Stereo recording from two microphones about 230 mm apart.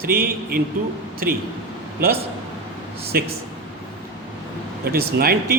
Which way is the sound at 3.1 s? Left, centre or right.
Right.